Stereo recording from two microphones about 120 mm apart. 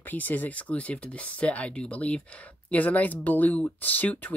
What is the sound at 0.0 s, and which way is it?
Speech, 15° left (ahead or behind).